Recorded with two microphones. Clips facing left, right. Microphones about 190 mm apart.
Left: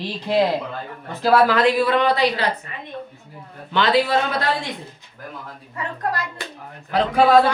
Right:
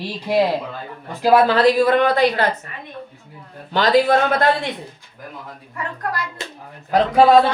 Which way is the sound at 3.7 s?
40° right (ahead or behind).